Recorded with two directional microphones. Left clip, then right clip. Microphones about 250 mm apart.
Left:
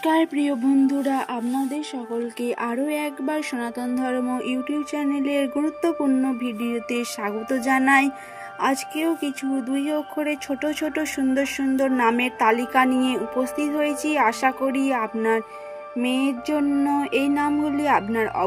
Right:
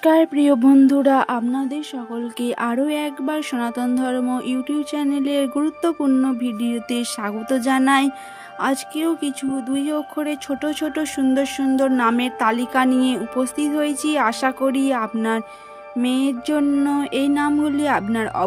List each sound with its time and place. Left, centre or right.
0.0 s speech: right
2.4 s speech: right
9.2 s speech: right